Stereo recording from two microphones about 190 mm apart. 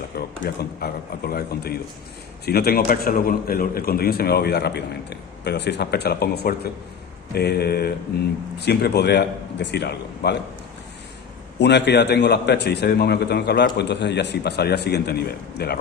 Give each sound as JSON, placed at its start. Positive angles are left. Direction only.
{"t": 0.2, "sound": "a man's voice", "side_deg": 55}
{"t": 11.6, "sound": "a man's voice", "side_deg": 65}